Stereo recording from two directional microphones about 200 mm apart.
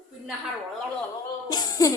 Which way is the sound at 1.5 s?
20° left (ahead or behind).